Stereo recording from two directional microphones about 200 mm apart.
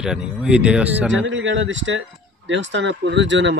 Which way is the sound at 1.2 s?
70° right (ahead or behind).